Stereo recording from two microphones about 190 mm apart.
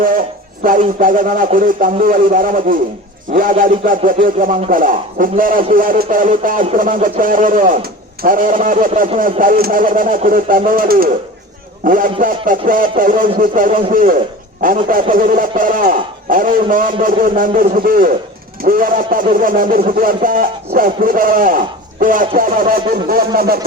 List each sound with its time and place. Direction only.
0.6 s speech: 45° right (ahead or behind)